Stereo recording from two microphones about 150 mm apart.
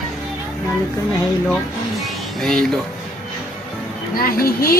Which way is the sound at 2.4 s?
5° left (ahead or behind).